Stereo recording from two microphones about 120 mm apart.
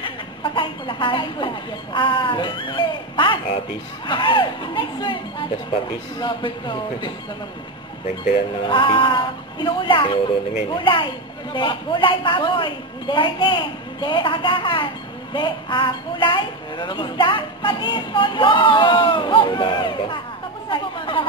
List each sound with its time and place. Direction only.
0.0 s speech: 45° left (ahead or behind)
8.6 s a woman's voice: 45° left (ahead or behind)
20.7 s a sound: 45° left (ahead or behind)